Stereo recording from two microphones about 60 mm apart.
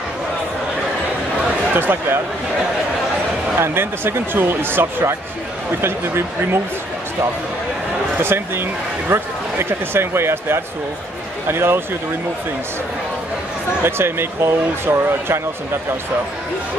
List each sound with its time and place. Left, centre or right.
1.8 s speech: right
3.5 s speech: right
8.2 s speech: right
13.8 s speech: right